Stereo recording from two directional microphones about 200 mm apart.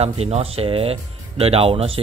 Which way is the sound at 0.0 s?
30° right (ahead or behind).